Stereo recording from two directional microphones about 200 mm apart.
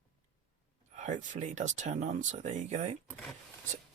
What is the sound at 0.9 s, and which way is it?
Speech, 35° right (ahead or behind).